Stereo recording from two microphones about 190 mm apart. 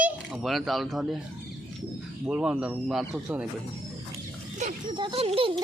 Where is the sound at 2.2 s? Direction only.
5° right (ahead or behind).